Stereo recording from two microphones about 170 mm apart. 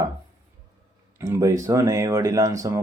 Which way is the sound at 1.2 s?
20° right (ahead or behind).